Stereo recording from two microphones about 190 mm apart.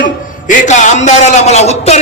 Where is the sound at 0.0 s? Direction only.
40° left (ahead or behind).